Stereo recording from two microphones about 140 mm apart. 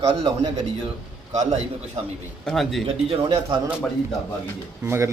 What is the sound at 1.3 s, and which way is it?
Speech, 55° right (ahead or behind).